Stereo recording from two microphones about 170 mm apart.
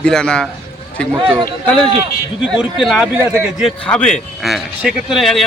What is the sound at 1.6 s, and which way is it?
Speech, 5° left (ahead or behind).